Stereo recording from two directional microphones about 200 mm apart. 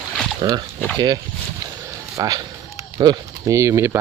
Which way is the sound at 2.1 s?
15° right (ahead or behind).